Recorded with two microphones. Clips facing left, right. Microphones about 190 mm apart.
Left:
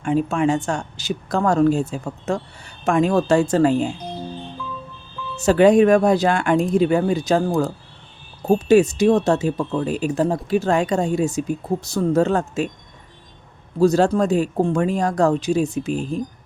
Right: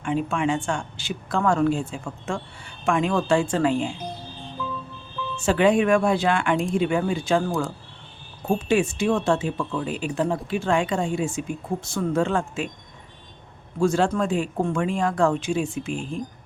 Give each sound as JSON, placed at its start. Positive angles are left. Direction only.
{"t": 0.0, "sound": "speech", "side_deg": 40}
{"t": 5.4, "sound": "speech", "side_deg": 40}
{"t": 13.7, "sound": "speech", "side_deg": 40}